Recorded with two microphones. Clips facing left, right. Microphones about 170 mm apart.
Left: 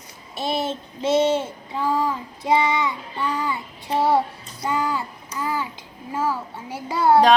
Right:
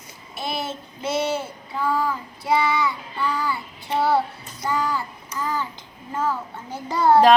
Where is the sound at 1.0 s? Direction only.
20° left (ahead or behind).